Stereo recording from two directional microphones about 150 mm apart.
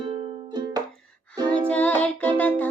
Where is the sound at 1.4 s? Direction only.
10° left (ahead or behind).